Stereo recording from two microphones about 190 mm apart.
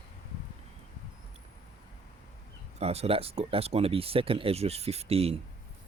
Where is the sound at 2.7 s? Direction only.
35° right (ahead or behind).